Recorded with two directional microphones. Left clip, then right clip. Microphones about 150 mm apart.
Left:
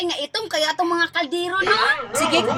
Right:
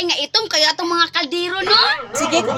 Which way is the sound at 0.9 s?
40° right (ahead or behind).